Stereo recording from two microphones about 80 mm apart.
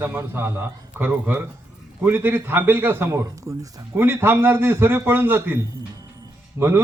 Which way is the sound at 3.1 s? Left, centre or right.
Right.